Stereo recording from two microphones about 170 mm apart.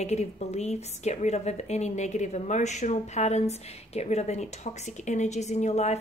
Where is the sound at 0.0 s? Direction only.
40° left (ahead or behind).